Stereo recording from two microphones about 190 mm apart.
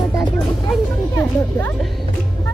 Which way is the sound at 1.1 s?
15° left (ahead or behind).